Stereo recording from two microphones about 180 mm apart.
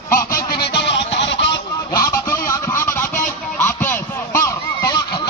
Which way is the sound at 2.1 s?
15° left (ahead or behind).